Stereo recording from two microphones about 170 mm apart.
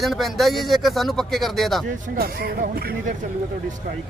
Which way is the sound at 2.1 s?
65° right (ahead or behind).